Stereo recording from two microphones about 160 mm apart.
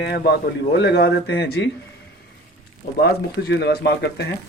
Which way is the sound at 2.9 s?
90° left.